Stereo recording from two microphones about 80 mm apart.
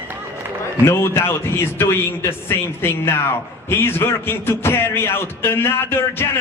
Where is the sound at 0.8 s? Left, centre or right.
Left.